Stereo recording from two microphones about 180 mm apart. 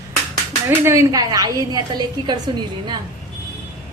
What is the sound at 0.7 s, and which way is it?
A woman's voice, 15° right (ahead or behind).